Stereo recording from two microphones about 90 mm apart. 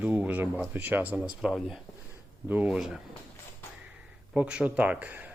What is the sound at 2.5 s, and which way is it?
Speech, 20° right (ahead or behind).